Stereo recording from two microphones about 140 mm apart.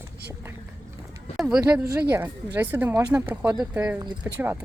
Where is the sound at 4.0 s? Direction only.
25° right (ahead or behind).